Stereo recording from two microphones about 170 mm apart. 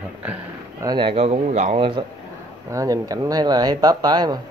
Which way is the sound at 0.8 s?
25° right (ahead or behind).